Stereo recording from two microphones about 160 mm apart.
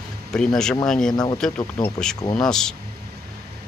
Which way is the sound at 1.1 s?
25° left (ahead or behind).